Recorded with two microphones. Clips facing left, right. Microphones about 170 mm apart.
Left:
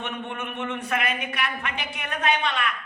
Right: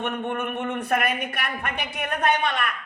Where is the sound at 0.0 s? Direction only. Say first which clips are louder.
Right 5 dB; 50° right (ahead or behind).